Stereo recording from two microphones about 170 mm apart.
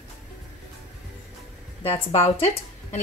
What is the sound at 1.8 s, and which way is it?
Speech, 35° left (ahead or behind).